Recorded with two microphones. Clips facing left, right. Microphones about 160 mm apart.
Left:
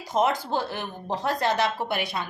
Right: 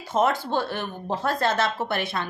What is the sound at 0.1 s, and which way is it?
Speech, 15° left (ahead or behind).